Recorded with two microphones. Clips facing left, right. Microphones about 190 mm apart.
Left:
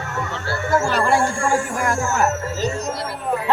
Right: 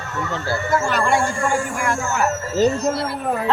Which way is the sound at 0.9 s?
30° left (ahead or behind).